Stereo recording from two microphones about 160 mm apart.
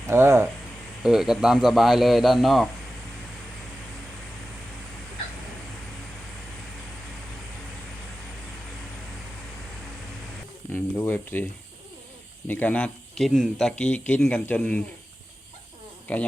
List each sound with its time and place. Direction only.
0.1 s speech: 15° right (ahead or behind)
1.0 s a man's voice: centre (ahead or behind)
10.7 s a sound: 10° left (ahead or behind)
12.5 s speech: 10° left (ahead or behind)
16.1 s speech: 10° left (ahead or behind)